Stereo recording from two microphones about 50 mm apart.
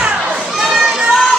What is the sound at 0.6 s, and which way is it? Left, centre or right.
Children playing, centre.